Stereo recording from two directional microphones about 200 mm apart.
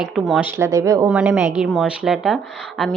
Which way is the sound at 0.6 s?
15° right (ahead or behind).